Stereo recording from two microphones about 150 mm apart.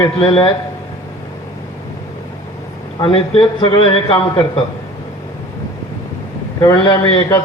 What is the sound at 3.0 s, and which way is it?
A man's voice, 35° left (ahead or behind).